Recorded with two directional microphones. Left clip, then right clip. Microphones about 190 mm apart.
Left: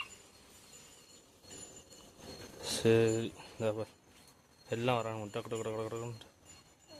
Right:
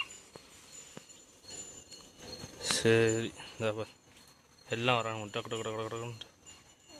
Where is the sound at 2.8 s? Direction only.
5° left (ahead or behind).